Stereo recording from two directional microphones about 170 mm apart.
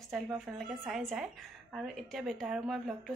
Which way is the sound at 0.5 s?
Centre (ahead or behind).